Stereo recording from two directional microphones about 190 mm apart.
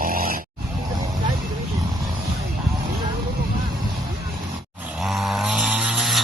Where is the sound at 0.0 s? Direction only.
50° right (ahead or behind).